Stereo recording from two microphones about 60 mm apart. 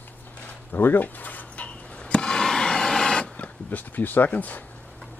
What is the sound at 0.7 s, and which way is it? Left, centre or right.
Speech, left.